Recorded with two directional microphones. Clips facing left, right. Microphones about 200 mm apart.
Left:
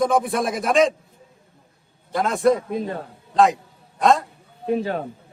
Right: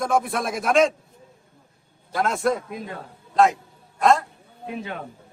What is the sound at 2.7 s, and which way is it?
Speech, 35° left (ahead or behind).